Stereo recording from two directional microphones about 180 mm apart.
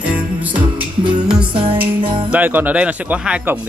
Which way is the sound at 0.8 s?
25° right (ahead or behind).